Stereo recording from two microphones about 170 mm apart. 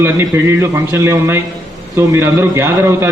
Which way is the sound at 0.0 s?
15° right (ahead or behind).